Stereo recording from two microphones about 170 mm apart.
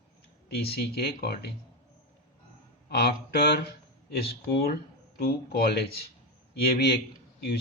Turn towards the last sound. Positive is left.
turn(degrees=75)  # may be behind; listen again after turning